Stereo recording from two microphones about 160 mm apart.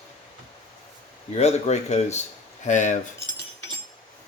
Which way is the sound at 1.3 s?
45° left (ahead or behind).